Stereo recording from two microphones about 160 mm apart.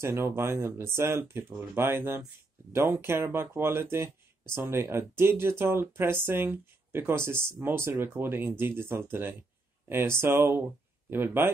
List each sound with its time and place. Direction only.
0.0 s speech: 15° right (ahead or behind)